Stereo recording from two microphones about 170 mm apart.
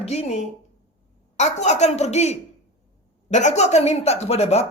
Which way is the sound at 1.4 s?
40° left (ahead or behind).